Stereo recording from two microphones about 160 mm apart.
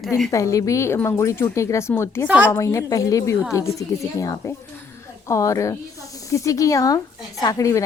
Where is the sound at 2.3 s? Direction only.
10° right (ahead or behind).